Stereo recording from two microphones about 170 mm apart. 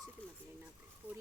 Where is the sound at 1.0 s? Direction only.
10° right (ahead or behind).